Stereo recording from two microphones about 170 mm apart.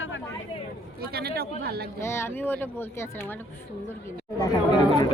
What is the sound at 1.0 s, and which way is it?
Speech, 65° right (ahead or behind).